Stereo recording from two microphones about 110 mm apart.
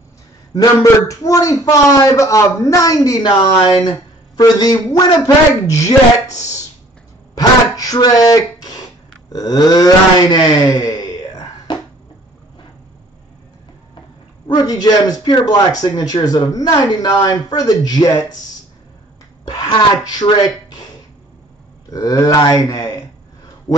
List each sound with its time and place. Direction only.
0.6 s speech: 30° left (ahead or behind)
4.4 s speech: 35° left (ahead or behind)
6.3 s speech: 90° left
7.3 s a sound: 35° left (ahead or behind)
9.3 s speech: 35° left (ahead or behind)
10.3 s a sound: 40° left (ahead or behind)
14.5 s speech: 35° left (ahead or behind)
19.4 s speech: 40° left (ahead or behind)
21.9 s speech: 35° left (ahead or behind)